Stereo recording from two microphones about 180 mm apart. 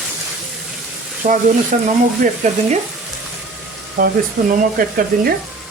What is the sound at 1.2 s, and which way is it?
Speech, 45° right (ahead or behind).